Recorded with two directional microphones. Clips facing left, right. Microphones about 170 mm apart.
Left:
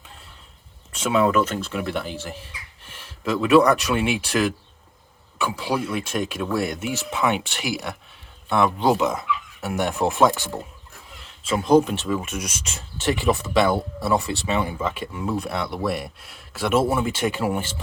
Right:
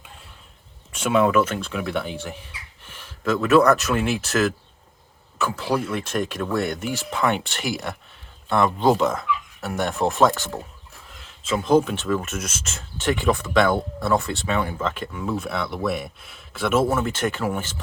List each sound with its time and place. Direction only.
0.9 s speech: centre (ahead or behind)
3.4 s speech: centre (ahead or behind)
5.5 s speech: centre (ahead or behind)
9.1 s a sound: 15° left (ahead or behind)
9.9 s speech: centre (ahead or behind)
11.4 s speech: centre (ahead or behind)
11.9 s speech: 10° left (ahead or behind)